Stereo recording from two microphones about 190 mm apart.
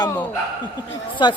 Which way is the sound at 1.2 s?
25° left (ahead or behind).